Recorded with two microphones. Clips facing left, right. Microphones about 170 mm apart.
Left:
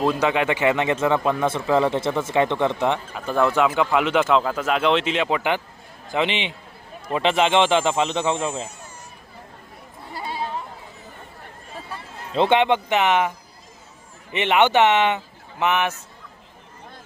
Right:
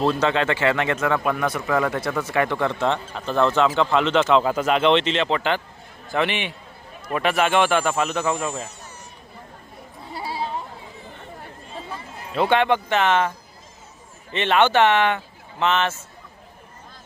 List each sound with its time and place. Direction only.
0.0 s speech: 10° left (ahead or behind)
12.3 s speech: 25° left (ahead or behind)
14.3 s speech: 15° left (ahead or behind)